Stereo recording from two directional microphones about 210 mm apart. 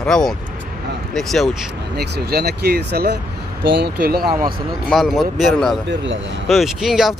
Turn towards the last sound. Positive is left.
turn(degrees=0)  # may be behind; listen again after turning